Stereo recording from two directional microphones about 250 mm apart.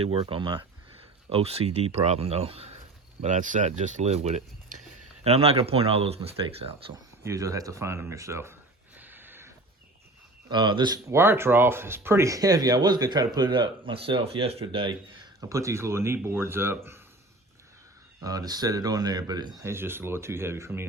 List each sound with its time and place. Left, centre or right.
0.0 s speech: right
7.3 s speech: centre
9.0 s a sound: centre
10.5 s speech: centre
18.2 s speech: centre